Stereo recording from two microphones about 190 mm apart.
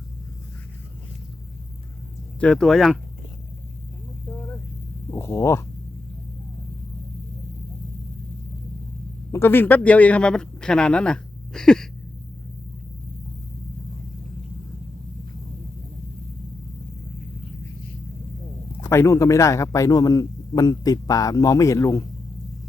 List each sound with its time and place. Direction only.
2.4 s speech: 5° left (ahead or behind)
5.1 s speech: 15° left (ahead or behind)
9.3 s speech: 10° left (ahead or behind)
18.8 s a man's voice: 15° left (ahead or behind)